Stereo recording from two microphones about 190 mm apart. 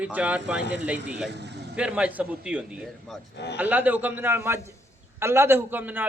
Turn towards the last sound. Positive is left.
turn(degrees=-10)  # may be behind; listen again after turning